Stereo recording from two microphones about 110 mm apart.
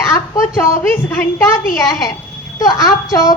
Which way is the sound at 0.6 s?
20° left (ahead or behind).